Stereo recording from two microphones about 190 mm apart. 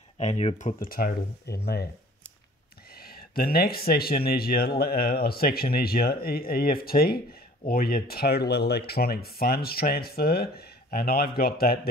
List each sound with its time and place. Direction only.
0.2 s speech: 35° left (ahead or behind)
0.7 s speech: 50° left (ahead or behind)
2.9 s speech: 55° left (ahead or behind)